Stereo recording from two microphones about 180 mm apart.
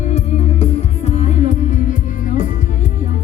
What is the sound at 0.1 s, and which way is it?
Music, 35° left (ahead or behind).